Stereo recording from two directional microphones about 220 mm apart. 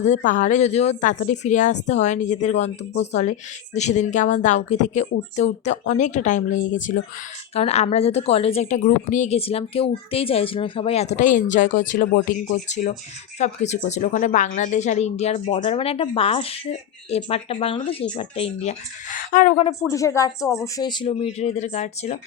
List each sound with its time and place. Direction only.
0.3 s a woman's voice: 35° left (ahead or behind)
19.9 s a woman's voice: 15° left (ahead or behind); by 22.2 s 30° left (ahead or behind)